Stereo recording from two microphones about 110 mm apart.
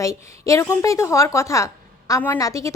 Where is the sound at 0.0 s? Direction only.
30° left (ahead or behind).